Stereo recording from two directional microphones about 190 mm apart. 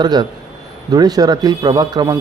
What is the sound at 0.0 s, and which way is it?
Speech, 20° right (ahead or behind).